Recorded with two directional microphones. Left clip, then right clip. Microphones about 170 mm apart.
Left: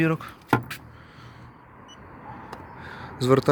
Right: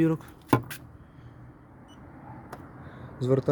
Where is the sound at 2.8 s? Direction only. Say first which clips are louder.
Left 6 dB; 5° right (ahead or behind).